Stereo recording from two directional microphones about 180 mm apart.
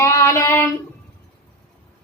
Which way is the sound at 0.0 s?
15° left (ahead or behind).